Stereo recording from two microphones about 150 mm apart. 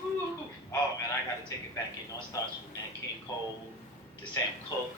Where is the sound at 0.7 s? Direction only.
20° left (ahead or behind).